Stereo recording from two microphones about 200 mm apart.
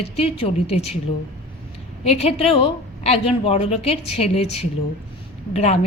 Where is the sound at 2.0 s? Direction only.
30° left (ahead or behind).